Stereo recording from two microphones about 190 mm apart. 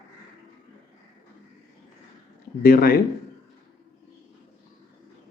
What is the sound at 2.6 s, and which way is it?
Speech, 50° left (ahead or behind).